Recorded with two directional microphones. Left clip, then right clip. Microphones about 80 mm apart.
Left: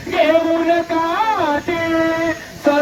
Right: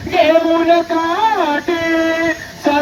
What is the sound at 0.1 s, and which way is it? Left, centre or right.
Music, left.